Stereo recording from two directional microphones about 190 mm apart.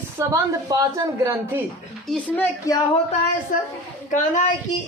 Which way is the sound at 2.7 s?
20° left (ahead or behind).